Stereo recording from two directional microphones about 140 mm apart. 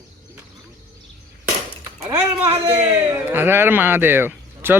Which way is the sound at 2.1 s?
20° right (ahead or behind).